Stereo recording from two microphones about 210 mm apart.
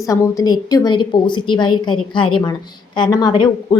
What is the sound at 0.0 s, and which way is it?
A woman's voice, 15° left (ahead or behind).